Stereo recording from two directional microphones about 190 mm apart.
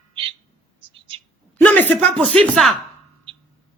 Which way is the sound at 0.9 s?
25° right (ahead or behind).